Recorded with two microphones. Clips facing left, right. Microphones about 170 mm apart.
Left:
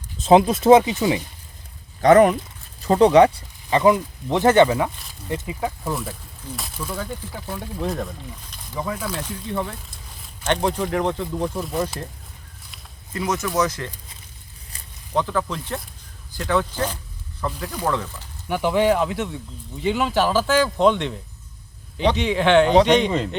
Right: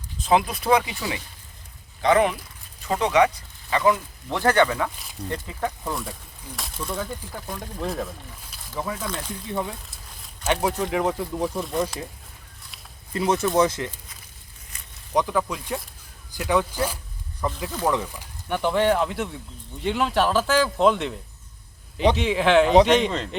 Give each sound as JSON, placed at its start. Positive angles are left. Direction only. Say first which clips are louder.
{"t": 0.3, "sound": "speech", "louder": "left 7 dB", "side_deg": 25}
{"t": 2.0, "sound": "speech", "louder": "left 6 dB", "side_deg": 45}
{"t": 2.8, "sound": "speech", "louder": "left 7 dB", "side_deg": 35}
{"t": 5.3, "sound": "speech", "louder": "left 3 dB", "side_deg": 10}
{"t": 9.2, "sound": "speech", "louder": "left 2 dB", "side_deg": -10}
{"t": 13.1, "sound": "speech", "louder": "right 2 dB", "side_deg": -30}
{"t": 15.1, "sound": "speech", "louder": "even", "side_deg": -10}
{"t": 18.4, "sound": "a man's voice", "louder": "left 2 dB", "side_deg": 5}